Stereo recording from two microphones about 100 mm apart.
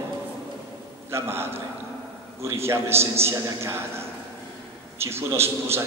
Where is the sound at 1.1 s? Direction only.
25° right (ahead or behind).